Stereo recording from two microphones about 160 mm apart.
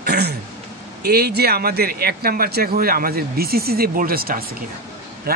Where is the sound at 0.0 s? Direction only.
90° right.